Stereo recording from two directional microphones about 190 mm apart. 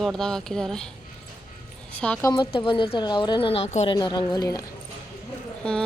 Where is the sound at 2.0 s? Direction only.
5° left (ahead or behind).